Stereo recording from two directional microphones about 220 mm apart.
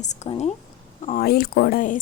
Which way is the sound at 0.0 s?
30° left (ahead or behind).